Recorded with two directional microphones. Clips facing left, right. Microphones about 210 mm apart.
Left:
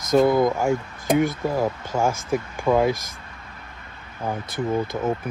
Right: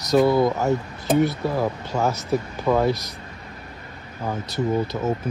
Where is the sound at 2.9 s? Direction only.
50° left (ahead or behind).